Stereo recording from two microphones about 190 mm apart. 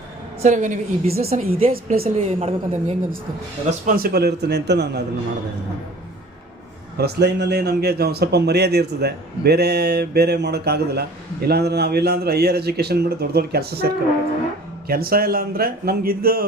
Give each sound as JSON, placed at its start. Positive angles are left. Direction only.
{"t": 0.4, "sound": "a woman's voice", "side_deg": -40}
{"t": 1.7, "sound": "a woman's voice", "side_deg": -45}
{"t": 3.7, "sound": "a man's voice", "side_deg": -45}
{"t": 6.9, "sound": "a man's voice", "side_deg": -60}